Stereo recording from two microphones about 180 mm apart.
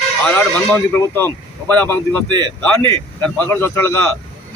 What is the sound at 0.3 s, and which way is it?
A man's voice, 10° left (ahead or behind).